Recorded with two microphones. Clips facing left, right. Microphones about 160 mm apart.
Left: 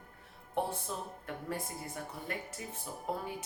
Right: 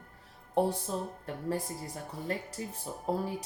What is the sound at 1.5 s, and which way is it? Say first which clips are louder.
Speech: right 7 dB; 35° right (ahead or behind).